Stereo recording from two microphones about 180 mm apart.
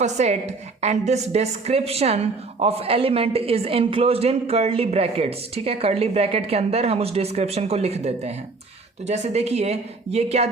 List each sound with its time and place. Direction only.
0.0 s a woman's voice: 40° right (ahead or behind)